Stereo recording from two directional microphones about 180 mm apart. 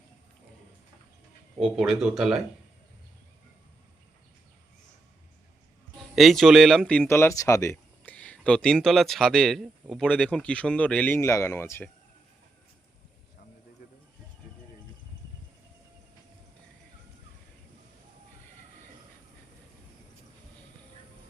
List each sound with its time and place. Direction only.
1.5 s speech: centre (ahead or behind)
6.0 s speech: centre (ahead or behind)
7.1 s speech: 15° left (ahead or behind)